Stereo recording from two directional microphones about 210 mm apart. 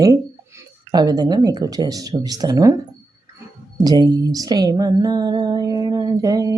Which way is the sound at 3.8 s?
20° right (ahead or behind).